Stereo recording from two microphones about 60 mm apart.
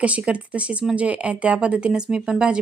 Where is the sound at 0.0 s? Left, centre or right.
Right.